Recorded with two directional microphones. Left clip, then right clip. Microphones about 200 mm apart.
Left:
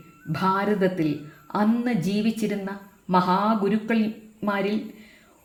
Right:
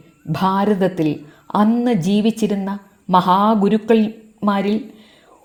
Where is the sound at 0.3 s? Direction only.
35° right (ahead or behind).